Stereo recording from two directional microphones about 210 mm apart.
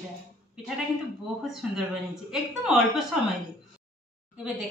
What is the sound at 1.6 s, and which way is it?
A woman's voice, 5° right (ahead or behind).